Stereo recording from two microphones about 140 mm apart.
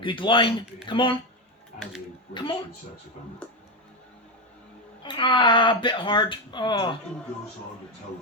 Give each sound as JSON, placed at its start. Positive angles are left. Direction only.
{"t": 0.0, "sound": "speech", "side_deg": 35}
{"t": 2.3, "sound": "speech", "side_deg": 35}
{"t": 3.4, "sound": "music", "side_deg": 10}
{"t": 5.0, "sound": "speech", "side_deg": 35}